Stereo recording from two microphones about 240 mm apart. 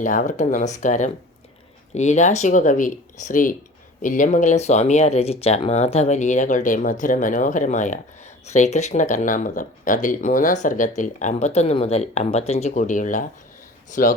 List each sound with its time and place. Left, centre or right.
0.0 s speech: left